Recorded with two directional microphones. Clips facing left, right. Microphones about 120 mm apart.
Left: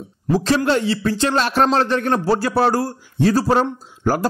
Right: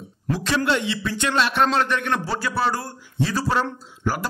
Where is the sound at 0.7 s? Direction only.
40° left (ahead or behind).